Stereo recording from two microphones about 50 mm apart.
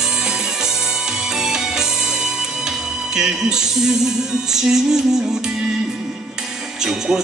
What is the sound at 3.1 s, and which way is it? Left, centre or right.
Speech, centre.